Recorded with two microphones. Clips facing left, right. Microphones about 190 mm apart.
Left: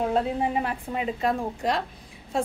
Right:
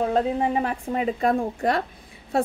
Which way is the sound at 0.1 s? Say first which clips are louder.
Right 2 dB; 40° right (ahead or behind).